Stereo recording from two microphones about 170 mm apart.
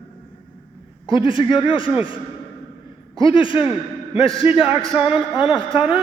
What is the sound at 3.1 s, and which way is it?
Speech, 30° left (ahead or behind).